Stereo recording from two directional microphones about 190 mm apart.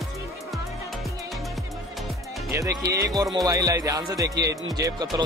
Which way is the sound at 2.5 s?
15° right (ahead or behind).